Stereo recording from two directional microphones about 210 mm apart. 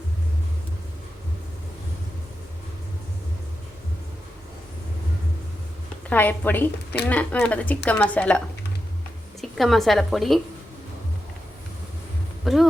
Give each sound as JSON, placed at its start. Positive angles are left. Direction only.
{"t": 6.1, "sound": "speech", "side_deg": 10}
{"t": 9.4, "sound": "a woman's voice", "side_deg": 0}
{"t": 12.4, "sound": "a sound", "side_deg": 0}